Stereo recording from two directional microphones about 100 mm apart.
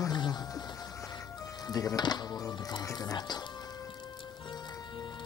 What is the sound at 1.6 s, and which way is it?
Speech, 40° left (ahead or behind).